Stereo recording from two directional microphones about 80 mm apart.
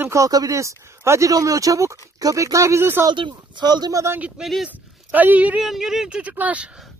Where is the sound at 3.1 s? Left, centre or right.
Right.